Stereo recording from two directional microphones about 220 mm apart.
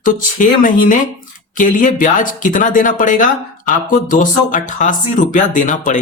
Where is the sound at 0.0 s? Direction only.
35° left (ahead or behind).